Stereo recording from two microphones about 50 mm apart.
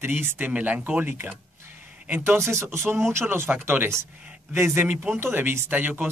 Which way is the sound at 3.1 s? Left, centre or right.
Right.